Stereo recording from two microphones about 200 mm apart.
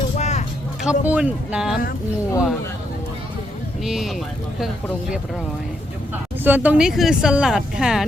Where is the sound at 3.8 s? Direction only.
Centre (ahead or behind).